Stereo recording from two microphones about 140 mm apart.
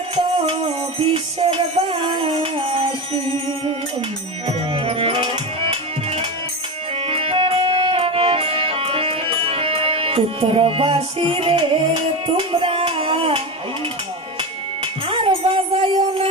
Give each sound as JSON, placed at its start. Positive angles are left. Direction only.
{"t": 0.1, "sound": "music", "side_deg": -40}
{"t": 4.5, "sound": "music", "side_deg": -45}
{"t": 15.0, "sound": "music", "side_deg": -40}